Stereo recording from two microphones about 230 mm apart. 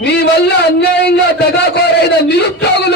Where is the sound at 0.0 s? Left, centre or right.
Left.